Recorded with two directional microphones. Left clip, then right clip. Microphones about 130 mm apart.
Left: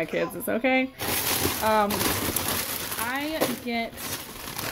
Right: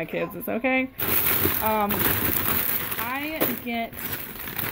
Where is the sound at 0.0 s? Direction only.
20° left (ahead or behind).